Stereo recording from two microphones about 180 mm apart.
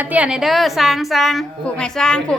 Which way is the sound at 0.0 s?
10° right (ahead or behind).